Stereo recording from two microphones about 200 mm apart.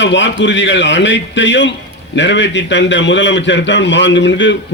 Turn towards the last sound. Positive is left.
turn(degrees=65)  # may be behind; listen again after turning